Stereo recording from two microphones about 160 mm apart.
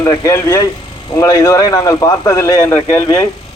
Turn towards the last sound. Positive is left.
turn(degrees=20)  # may be behind; listen again after turning